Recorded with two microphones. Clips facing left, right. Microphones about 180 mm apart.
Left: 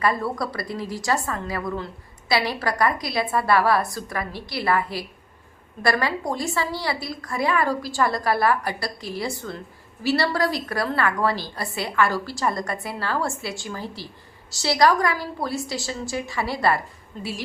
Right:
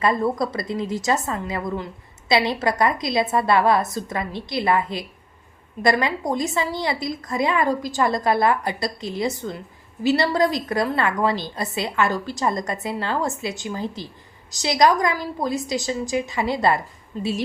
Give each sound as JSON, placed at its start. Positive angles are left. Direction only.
{"t": 0.0, "sound": "a woman's voice", "side_deg": -20}